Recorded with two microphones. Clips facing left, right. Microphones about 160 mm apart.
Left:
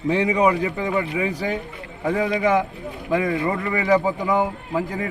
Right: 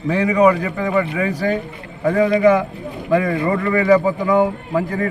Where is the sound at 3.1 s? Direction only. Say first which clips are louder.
Right 4 dB; 15° left (ahead or behind).